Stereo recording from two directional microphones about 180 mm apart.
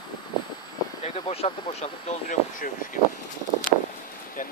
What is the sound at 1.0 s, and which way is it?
Speech, 35° left (ahead or behind).